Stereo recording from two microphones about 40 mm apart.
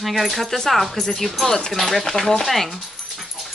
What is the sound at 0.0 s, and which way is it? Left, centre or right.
Speech, centre.